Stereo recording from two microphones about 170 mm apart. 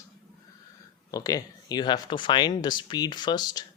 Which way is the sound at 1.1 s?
20° left (ahead or behind).